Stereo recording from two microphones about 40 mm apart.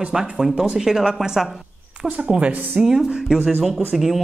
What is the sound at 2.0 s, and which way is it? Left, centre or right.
Speech, right.